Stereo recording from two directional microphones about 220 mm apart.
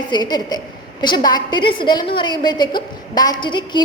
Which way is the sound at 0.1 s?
20° left (ahead or behind).